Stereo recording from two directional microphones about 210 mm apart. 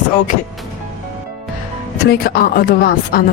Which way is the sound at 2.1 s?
45° left (ahead or behind).